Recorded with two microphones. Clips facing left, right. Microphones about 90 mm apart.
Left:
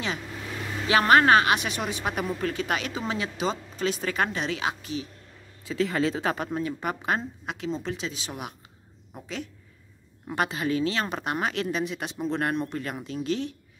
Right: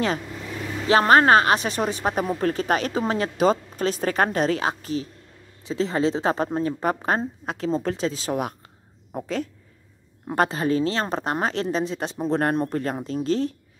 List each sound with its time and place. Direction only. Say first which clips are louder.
0.8 s speech: right 3 dB; 35° right (ahead or behind)
5.7 s speech: right 3 dB; 30° right (ahead or behind)